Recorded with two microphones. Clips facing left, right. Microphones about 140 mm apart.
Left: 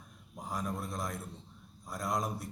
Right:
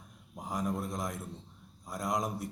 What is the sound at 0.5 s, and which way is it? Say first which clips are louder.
A man's voice: right 3 dB; 20° right (ahead or behind).